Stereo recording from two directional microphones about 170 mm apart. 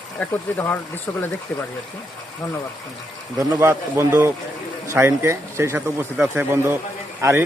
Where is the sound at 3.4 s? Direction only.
15° right (ahead or behind).